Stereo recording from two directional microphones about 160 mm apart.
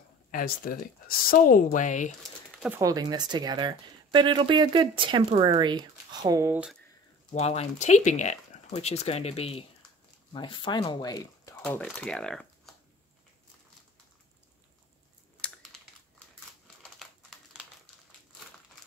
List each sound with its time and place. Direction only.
0.3 s speech: 65° left (ahead or behind)
2.8 s speech: 25° right (ahead or behind)
7.3 s speech: 40° left (ahead or behind); by 11.5 s 25° left (ahead or behind)
11.6 s speech: 10° left (ahead or behind)
15.4 s typing: 10° left (ahead or behind)